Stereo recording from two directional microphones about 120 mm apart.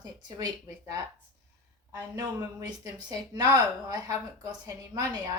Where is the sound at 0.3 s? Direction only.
30° right (ahead or behind).